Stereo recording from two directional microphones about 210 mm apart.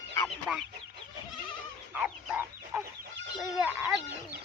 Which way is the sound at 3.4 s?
5° right (ahead or behind).